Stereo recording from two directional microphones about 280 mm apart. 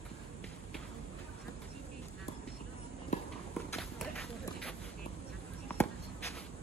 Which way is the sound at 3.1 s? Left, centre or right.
Left.